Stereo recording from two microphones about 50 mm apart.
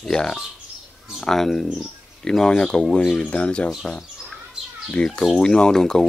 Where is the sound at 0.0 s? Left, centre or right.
Centre.